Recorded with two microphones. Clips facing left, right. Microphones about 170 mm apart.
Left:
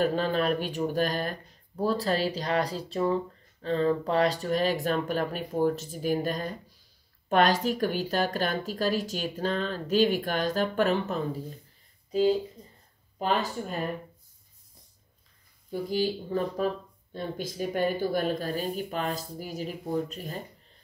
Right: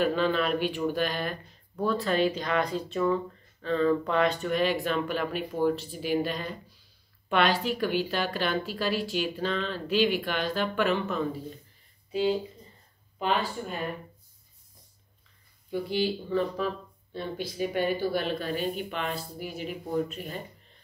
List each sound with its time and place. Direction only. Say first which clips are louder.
0.0 s speech: even; 40° left (ahead or behind)
15.7 s speech: even; 40° left (ahead or behind)